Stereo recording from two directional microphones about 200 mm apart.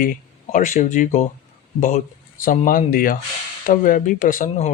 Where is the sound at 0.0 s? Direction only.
40° left (ahead or behind).